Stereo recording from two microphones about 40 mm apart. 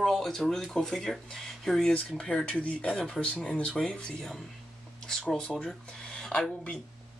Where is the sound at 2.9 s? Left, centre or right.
Centre.